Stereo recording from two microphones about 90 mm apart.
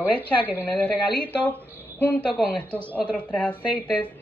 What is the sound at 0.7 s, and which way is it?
A woman's voice, 15° left (ahead or behind).